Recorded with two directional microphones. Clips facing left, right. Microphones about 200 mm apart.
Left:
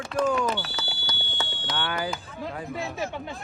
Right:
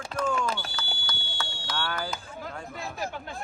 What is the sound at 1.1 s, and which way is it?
Fire alarm, 20° left (ahead or behind).